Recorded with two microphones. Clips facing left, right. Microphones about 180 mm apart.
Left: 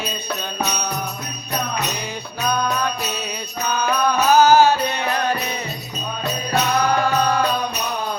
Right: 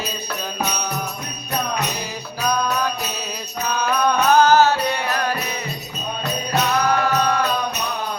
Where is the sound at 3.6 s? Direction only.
Centre (ahead or behind); by 5.3 s 20° left (ahead or behind).